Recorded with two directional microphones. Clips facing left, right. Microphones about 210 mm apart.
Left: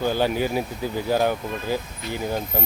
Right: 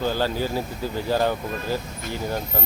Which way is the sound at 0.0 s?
15° left (ahead or behind).